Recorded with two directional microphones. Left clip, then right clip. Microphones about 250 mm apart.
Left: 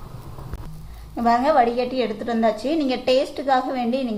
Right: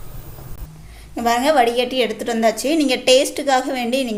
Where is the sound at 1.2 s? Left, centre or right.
Right.